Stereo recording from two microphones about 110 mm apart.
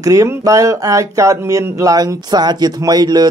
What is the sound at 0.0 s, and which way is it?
Speech, 30° right (ahead or behind).